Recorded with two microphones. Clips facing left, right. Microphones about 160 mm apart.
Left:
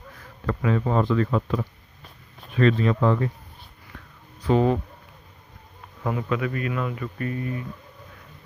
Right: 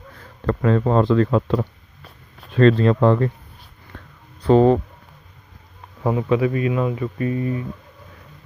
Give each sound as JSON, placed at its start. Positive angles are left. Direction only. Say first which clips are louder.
{"t": 0.2, "sound": "speech", "louder": "right 6 dB", "side_deg": -45}
{"t": 2.6, "sound": "speech", "louder": "right 6 dB", "side_deg": -35}
{"t": 3.0, "sound": "speech", "louder": "right 6 dB", "side_deg": -50}
{"t": 4.5, "sound": "speech", "louder": "right 7 dB", "side_deg": -40}
{"t": 6.0, "sound": "speech", "louder": "right 7 dB", "side_deg": -25}